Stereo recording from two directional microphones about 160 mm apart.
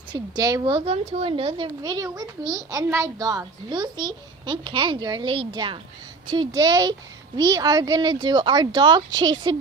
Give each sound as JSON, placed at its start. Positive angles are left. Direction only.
{"t": 0.1, "sound": "a woman's voice", "side_deg": -25}